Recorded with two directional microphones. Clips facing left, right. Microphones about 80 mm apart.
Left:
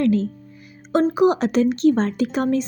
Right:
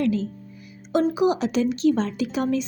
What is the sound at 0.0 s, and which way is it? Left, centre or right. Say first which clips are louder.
Music: left 4 dB; left.